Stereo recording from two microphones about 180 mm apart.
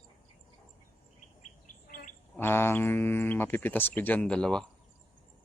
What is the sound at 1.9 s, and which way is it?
Bird, 50° left (ahead or behind).